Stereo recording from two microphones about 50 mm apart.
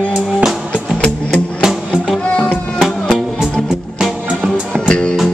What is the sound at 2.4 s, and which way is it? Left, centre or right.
Music, centre.